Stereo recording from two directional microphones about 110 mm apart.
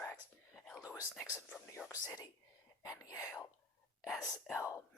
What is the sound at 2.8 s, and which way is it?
Speech, 30° left (ahead or behind).